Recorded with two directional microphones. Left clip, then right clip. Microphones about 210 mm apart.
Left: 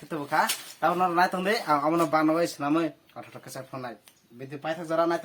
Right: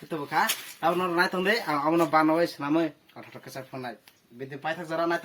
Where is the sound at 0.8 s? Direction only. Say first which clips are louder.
Left 2 dB; 15° left (ahead or behind).